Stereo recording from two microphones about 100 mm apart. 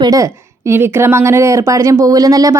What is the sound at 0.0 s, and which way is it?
A woman's voice, 35° right (ahead or behind).